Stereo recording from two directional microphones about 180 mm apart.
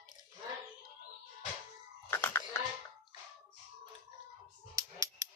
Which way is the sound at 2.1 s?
10° left (ahead or behind).